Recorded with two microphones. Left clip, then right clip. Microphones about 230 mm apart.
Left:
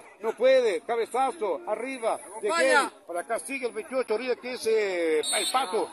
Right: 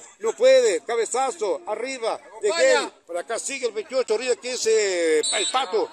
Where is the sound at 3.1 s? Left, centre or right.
Right.